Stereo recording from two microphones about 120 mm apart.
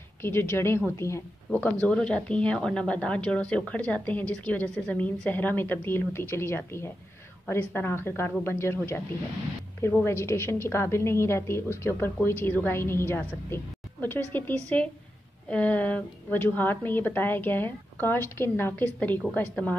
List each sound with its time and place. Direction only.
0.2 s a woman's voice: 20° left (ahead or behind)
1.5 s a woman's voice: 10° left (ahead or behind)
14.3 s speech: 15° left (ahead or behind)